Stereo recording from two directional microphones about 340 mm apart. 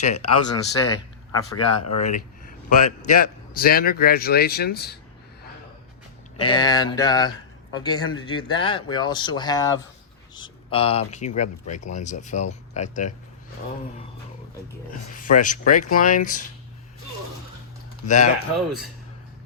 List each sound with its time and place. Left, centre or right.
0.0 s a man's voice: centre
0.5 s speech: left
2.0 s a man's voice: left
6.4 s a man's voice: centre
15.1 s a man's voice: left
18.0 s a man's voice: left